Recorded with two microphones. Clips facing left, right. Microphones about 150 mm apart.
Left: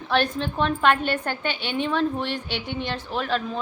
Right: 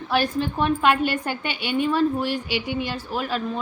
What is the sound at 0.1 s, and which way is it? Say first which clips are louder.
A woman's voice: right 1 dB; 5° right (ahead or behind).